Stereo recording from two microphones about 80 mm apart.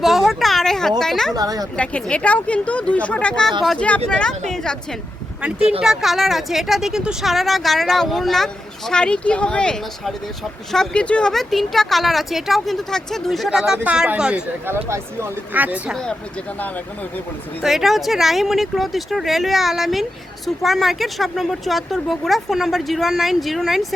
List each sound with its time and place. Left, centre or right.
0.0 s a sound: centre
1.4 s speech: right
1.7 s speech: centre
5.4 s speech: centre
14.7 s speech: right
15.5 s speech: centre
17.6 s speech: centre